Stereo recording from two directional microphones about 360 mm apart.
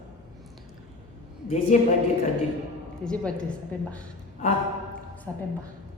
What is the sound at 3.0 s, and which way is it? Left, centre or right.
Speech, centre.